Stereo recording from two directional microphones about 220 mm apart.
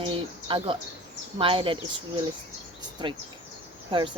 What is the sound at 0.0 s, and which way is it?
Speech, 25° right (ahead or behind).